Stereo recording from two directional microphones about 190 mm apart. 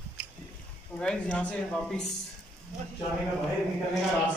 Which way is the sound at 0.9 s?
5° left (ahead or behind).